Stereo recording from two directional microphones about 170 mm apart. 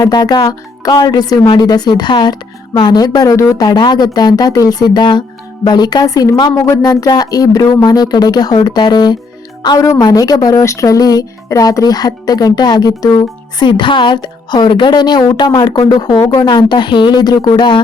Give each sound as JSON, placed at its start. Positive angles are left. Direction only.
{"t": 0.0, "sound": "speech", "side_deg": 25}